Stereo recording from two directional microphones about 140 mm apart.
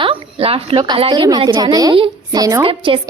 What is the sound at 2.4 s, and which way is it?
Speech, 25° right (ahead or behind).